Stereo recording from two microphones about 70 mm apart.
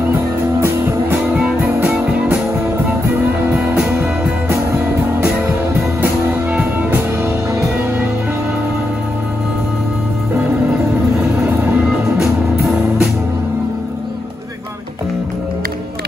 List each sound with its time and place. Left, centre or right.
0.1 s music: right
3.9 s music: right
6.5 s music: right
7.2 s music: right
11.3 s music: right